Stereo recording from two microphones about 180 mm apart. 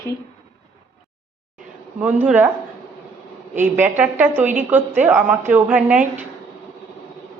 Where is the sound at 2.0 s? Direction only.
10° right (ahead or behind).